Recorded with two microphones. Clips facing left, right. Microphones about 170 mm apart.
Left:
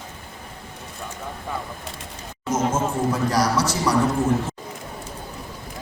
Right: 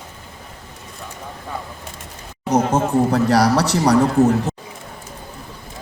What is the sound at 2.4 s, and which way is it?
Speech, 65° right (ahead or behind).